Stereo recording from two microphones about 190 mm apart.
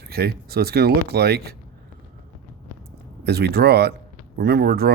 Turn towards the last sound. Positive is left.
turn(degrees=-55)  # may be behind; listen again after turning